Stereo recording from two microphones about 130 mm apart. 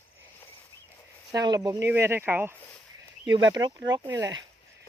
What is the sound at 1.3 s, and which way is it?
Speech, 35° right (ahead or behind).